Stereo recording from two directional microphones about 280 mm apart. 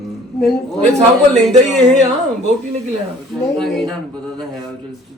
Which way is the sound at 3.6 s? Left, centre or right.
Centre.